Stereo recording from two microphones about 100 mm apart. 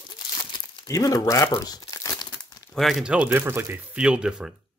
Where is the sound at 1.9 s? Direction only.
35° left (ahead or behind).